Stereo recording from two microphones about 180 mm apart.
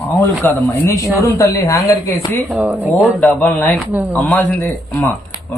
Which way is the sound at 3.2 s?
5° left (ahead or behind).